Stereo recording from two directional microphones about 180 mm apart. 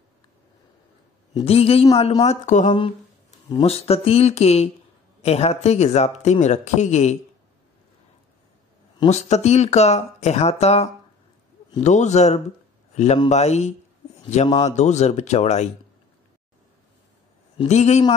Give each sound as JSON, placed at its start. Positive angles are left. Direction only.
{"t": 1.3, "sound": "speech", "side_deg": 35}
{"t": 9.1, "sound": "a man's voice", "side_deg": 40}
{"t": 14.8, "sound": "speech", "side_deg": 40}
{"t": 17.6, "sound": "speech", "side_deg": 40}